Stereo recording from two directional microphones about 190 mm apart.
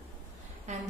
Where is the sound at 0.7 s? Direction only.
35° right (ahead or behind).